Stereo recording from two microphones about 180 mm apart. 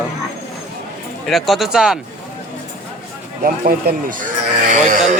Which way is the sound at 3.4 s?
55° right (ahead or behind).